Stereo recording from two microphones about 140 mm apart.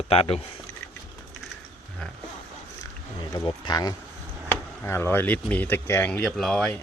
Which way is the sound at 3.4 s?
25° left (ahead or behind).